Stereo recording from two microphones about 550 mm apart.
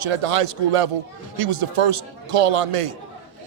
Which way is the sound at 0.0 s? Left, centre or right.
Right.